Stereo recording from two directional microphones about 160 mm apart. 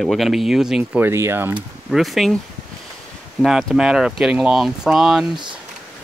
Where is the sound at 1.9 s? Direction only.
Centre (ahead or behind).